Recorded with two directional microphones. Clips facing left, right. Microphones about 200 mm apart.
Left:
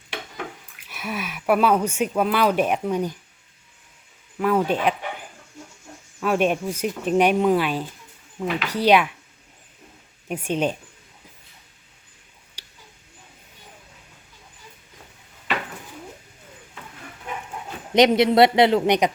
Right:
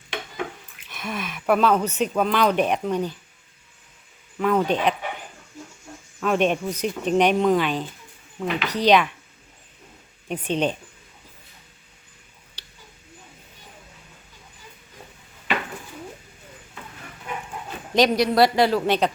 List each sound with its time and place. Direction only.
0.9 s speech: 10° left (ahead or behind)
4.4 s speech: 5° left (ahead or behind)
6.1 s speech: 5° left (ahead or behind)
10.2 s speech: 10° left (ahead or behind)
12.6 s a sound: 10° left (ahead or behind)
17.9 s speech: 20° left (ahead or behind)